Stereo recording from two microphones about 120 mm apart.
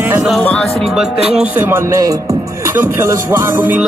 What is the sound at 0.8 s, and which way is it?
Music, 5° right (ahead or behind).